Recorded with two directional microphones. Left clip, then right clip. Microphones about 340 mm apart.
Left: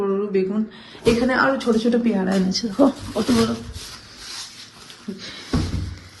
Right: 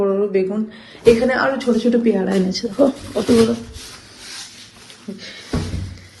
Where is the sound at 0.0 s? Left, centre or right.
Centre.